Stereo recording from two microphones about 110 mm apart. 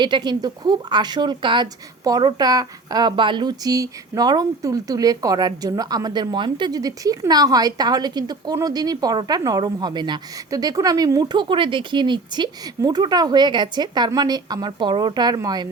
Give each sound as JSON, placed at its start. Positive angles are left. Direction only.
{"t": 0.0, "sound": "a woman's voice", "side_deg": -40}